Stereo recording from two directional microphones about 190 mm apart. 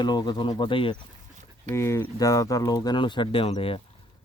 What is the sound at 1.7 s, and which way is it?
Speech, 15° left (ahead or behind).